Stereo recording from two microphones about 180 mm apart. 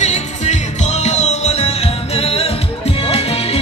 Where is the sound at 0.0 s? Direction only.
40° left (ahead or behind).